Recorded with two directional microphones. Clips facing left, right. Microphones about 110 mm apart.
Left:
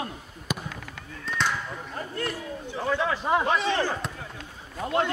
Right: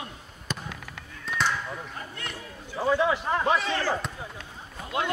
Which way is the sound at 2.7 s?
10° right (ahead or behind).